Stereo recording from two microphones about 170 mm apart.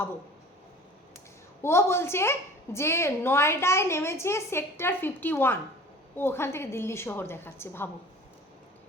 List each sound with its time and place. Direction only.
1.6 s a woman's voice: 15° left (ahead or behind)